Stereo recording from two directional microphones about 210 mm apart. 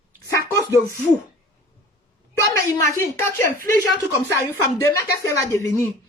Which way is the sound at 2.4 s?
15° left (ahead or behind).